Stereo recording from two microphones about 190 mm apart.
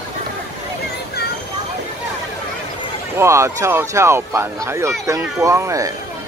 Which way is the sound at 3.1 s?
15° right (ahead or behind).